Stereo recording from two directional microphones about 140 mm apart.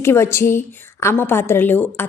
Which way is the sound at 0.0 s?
20° left (ahead or behind).